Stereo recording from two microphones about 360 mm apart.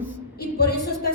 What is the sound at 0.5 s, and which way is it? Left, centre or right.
Speech, left.